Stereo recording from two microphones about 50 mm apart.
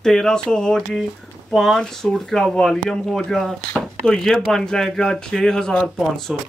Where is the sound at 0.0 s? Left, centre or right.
Centre.